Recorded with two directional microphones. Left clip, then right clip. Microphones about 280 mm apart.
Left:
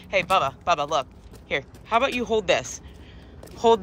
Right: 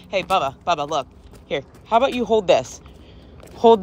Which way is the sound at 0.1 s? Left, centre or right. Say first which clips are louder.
Right 1 dB; centre.